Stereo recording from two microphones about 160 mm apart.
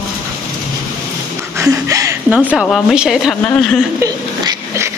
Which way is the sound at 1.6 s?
20° right (ahead or behind).